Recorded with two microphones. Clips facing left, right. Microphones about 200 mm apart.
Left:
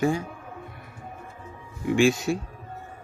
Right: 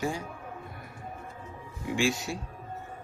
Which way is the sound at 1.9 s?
60° left (ahead or behind).